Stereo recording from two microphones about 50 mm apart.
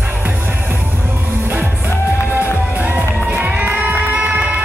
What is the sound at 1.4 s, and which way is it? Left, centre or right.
Music, right.